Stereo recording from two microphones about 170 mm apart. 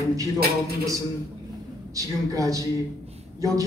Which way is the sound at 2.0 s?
20° right (ahead or behind).